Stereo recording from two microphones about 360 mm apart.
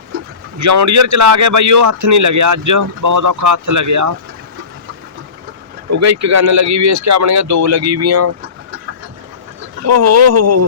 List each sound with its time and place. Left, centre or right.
0.6 s speech: right
5.9 s speech: right
9.8 s speech: right